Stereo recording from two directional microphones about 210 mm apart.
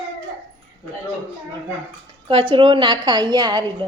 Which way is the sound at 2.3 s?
25° right (ahead or behind).